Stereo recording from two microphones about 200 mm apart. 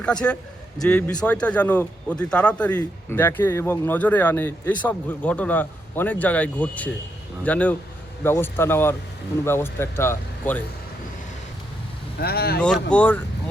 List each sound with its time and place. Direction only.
0.0 s a man's voice: 5° left (ahead or behind)
12.2 s speech: 50° left (ahead or behind)
12.9 s speech: 5° left (ahead or behind)